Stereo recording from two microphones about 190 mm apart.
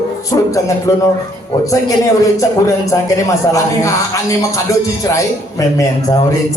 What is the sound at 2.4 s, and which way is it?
Speech, 15° left (ahead or behind).